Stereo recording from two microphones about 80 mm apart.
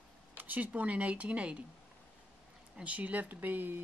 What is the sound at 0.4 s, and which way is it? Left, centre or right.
Speech, centre.